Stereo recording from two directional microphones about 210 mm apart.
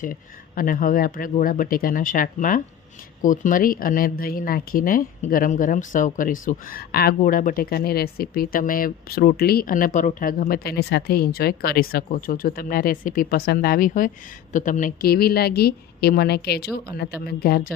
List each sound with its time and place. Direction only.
0.0 s speech: 40° left (ahead or behind)